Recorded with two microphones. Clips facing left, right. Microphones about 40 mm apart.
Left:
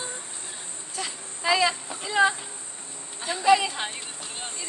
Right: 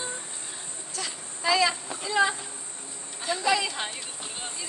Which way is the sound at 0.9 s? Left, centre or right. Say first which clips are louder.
Left 2 dB; centre.